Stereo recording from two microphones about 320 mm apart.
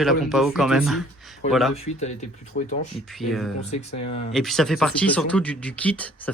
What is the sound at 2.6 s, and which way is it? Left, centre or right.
Speech, left.